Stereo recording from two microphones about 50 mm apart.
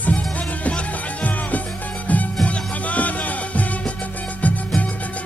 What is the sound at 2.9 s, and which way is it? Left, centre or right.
Music, left.